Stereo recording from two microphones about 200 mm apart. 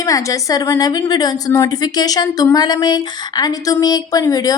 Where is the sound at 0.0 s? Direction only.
15° left (ahead or behind).